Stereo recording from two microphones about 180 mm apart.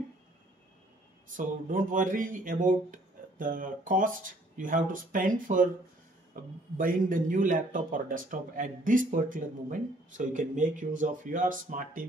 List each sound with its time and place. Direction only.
1.3 s speech: 45° right (ahead or behind)